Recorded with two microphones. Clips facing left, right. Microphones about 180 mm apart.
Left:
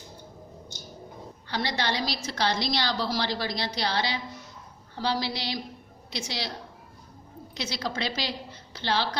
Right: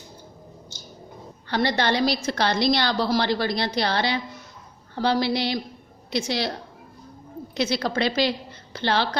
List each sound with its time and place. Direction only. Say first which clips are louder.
1.5 s a woman's voice: right 7 dB; 55° right (ahead or behind)
7.5 s a woman's voice: right 8 dB; 55° right (ahead or behind)